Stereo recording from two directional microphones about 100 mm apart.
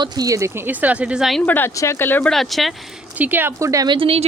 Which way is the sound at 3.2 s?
20° right (ahead or behind).